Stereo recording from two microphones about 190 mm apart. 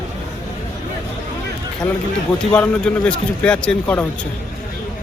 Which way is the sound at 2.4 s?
5° left (ahead or behind).